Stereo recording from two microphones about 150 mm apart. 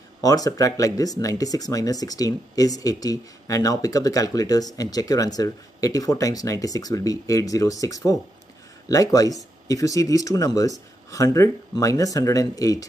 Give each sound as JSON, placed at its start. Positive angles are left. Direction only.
{"t": 0.2, "sound": "speech", "side_deg": 25}